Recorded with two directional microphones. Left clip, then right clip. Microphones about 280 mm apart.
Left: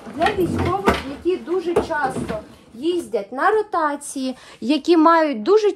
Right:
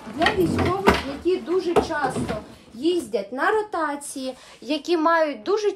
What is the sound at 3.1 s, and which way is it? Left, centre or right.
A woman's voice, centre.